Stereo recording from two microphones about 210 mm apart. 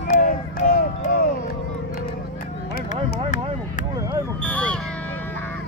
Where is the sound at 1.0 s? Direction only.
45° left (ahead or behind).